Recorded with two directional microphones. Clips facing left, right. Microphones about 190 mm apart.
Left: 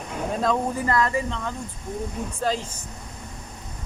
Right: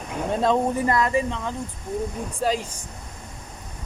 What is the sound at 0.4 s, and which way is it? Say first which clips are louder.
Speech: right 3 dB; 20° right (ahead or behind).